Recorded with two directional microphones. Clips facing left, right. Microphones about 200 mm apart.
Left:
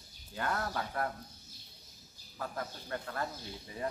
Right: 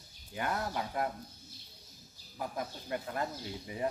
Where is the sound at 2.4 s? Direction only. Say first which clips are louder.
Right 2 dB; 15° right (ahead or behind).